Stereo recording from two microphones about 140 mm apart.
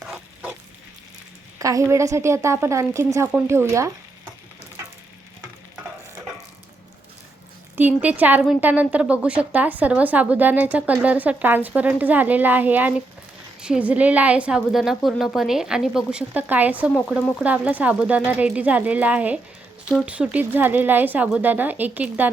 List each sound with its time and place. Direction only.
0.0 s pig: 10° right (ahead or behind)
1.5 s a woman's voice: 25° right (ahead or behind)
7.8 s a woman's voice: 10° right (ahead or behind)